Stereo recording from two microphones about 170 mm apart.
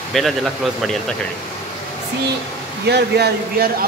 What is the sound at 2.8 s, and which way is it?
Speech, 75° right (ahead or behind).